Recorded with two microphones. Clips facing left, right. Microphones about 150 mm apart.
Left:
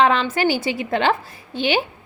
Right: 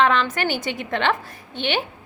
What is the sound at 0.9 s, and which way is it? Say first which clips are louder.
Speech: left 3 dB; 35° left (ahead or behind).